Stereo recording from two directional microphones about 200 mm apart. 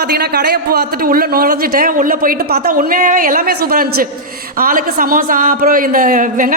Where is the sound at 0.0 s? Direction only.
55° right (ahead or behind).